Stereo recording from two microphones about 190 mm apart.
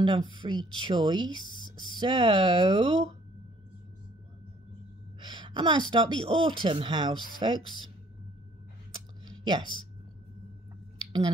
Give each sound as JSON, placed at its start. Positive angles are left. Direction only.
{"t": 0.0, "sound": "speech", "side_deg": -25}
{"t": 5.2, "sound": "speech", "side_deg": -25}
{"t": 9.4, "sound": "speech", "side_deg": -25}
{"t": 11.0, "sound": "a sound", "side_deg": -25}